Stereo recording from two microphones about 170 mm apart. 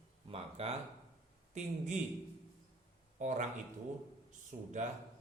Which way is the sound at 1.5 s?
45° right (ahead or behind).